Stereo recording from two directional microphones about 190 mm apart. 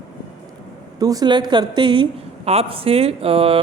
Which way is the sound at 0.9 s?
20° right (ahead or behind).